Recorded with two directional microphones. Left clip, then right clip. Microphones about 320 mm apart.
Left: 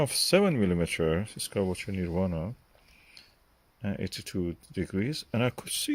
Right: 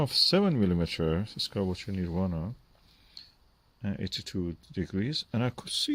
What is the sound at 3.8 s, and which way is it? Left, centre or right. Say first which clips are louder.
Speech: even; centre.